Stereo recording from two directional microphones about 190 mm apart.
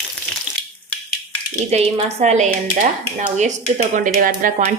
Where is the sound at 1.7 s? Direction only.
35° right (ahead or behind).